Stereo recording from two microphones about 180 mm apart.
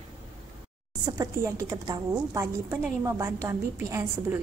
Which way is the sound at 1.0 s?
20° right (ahead or behind).